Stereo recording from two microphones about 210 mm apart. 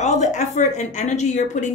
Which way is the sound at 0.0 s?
35° left (ahead or behind).